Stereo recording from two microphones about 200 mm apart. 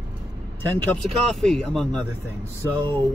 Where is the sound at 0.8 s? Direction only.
5° left (ahead or behind).